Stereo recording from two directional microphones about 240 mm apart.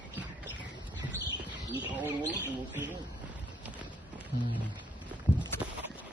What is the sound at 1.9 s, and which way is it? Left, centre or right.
Speech, centre.